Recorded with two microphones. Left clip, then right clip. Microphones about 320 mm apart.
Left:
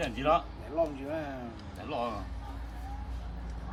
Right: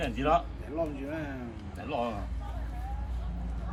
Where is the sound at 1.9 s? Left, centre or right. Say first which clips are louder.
Right 2 dB; centre.